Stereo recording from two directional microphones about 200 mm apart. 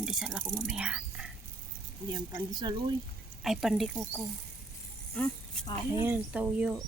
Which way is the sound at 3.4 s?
Centre (ahead or behind).